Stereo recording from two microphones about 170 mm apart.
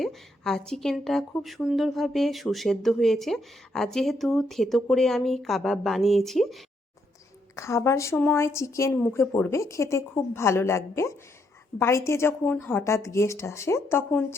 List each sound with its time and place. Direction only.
0.0 s a woman's voice: centre (ahead or behind)
7.5 s speech: 15° left (ahead or behind)
8.9 s a woman's voice: 5° left (ahead or behind)